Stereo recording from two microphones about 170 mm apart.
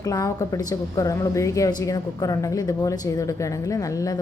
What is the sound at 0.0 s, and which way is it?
A woman's voice, 20° left (ahead or behind).